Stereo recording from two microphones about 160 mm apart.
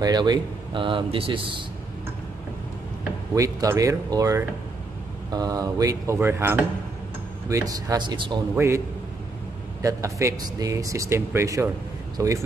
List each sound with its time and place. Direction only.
0.0 s speech: 25° right (ahead or behind)
3.3 s speech: 20° right (ahead or behind)
8.5 s speech: 15° right (ahead or behind)